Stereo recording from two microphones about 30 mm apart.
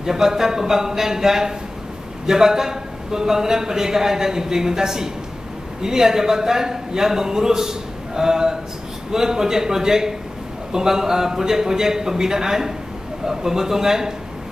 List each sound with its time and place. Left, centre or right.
0.0 s speech: centre